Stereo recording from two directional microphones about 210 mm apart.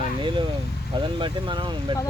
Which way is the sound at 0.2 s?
25° right (ahead or behind).